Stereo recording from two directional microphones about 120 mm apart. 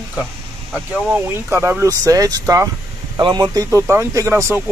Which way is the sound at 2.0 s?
30° right (ahead or behind).